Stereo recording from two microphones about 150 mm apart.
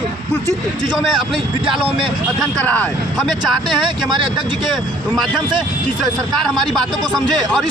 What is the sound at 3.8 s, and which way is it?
Speech, 30° right (ahead or behind).